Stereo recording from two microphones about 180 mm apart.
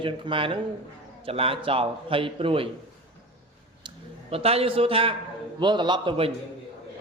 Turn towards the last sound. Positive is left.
turn(degrees=-30)  # may be behind; listen again after turning